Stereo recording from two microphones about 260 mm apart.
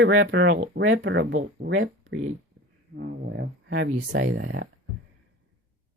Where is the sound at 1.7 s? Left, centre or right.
Right.